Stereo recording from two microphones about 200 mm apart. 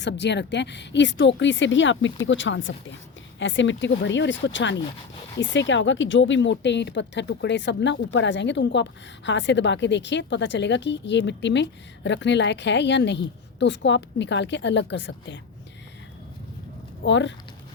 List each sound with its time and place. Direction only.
0.0 s speech: 60° left (ahead or behind)
17.0 s speech: 65° left (ahead or behind)